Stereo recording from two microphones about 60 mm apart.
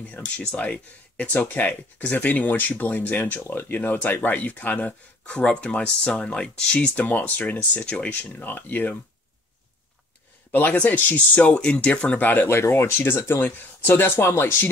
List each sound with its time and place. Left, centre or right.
0.0 s speech: left
10.5 s speech: left
12.4 s speech: left
14.2 s speech: left